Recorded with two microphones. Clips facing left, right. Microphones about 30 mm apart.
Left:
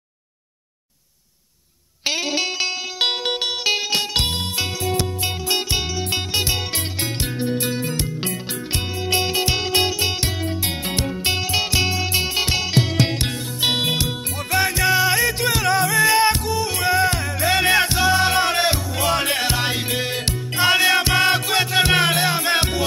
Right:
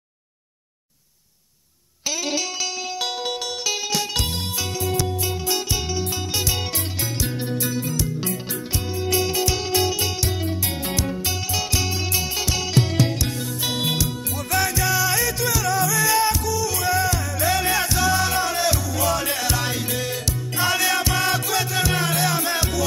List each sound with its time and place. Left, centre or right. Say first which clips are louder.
2.0 s music: left 3 dB; left
4.6 s music: right 1 dB; left
6.3 s music: left 2 dB; left
6.7 s music: left 2 dB; left
10.9 s music: left 4 dB; left
22.2 s music: left 3 dB; left